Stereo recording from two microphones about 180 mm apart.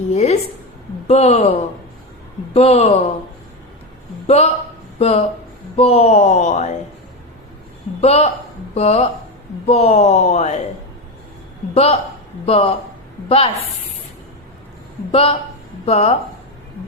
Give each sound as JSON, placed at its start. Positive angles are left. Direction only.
{"t": 0.1, "sound": "speech", "side_deg": 35}
{"t": 2.5, "sound": "speech", "side_deg": 35}
{"t": 4.3, "sound": "speech", "side_deg": 35}
{"t": 8.0, "sound": "speech", "side_deg": 35}
{"t": 11.7, "sound": "speech", "side_deg": 35}
{"t": 15.1, "sound": "speech", "side_deg": 30}